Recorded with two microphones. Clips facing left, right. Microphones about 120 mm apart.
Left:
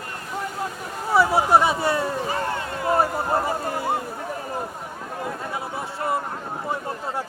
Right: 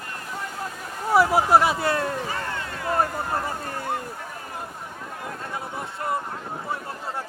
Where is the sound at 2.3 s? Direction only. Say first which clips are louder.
Left 4 dB; 25° left (ahead or behind).